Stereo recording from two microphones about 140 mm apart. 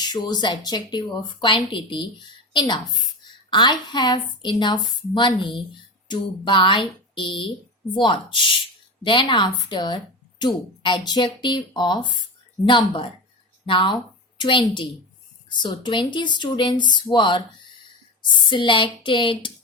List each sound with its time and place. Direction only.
0.0 s a woman's voice: 30° left (ahead or behind)